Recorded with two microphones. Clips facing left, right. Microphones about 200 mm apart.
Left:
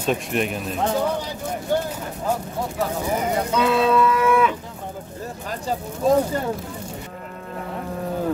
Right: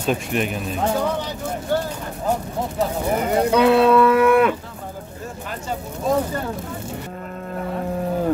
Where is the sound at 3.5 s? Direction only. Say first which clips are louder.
Right 6 dB; 60° right (ahead or behind).